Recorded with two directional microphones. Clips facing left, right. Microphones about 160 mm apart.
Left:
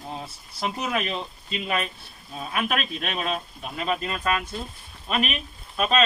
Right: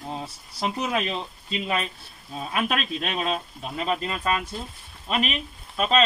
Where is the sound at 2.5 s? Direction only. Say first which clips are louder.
Right 1 dB; 30° right (ahead or behind).